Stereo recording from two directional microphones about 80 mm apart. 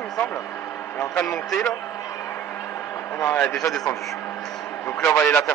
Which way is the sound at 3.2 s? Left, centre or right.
Left.